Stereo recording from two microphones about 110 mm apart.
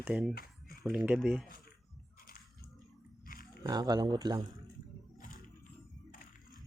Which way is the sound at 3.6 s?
40° right (ahead or behind).